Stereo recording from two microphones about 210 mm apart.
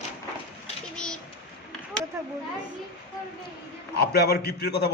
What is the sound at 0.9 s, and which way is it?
Pigeon, 5° left (ahead or behind).